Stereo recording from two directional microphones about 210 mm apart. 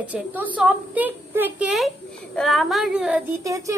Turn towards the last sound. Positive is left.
turn(degrees=-10)  # may be behind; listen again after turning